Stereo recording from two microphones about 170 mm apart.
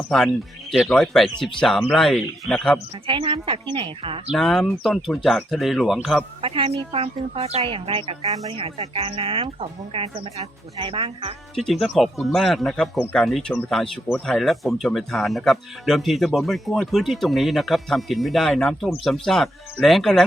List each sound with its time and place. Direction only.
0.1 s speech: centre (ahead or behind)
3.1 s a woman's voice: 30° right (ahead or behind)
4.3 s speech: centre (ahead or behind)
6.4 s a woman's voice: 35° right (ahead or behind)
11.5 s speech: centre (ahead or behind)